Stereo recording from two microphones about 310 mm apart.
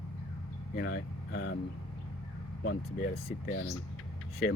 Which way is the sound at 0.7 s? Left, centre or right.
Left.